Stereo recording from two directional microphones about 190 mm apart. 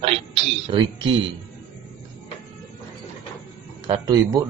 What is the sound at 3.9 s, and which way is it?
Speech, 20° right (ahead or behind).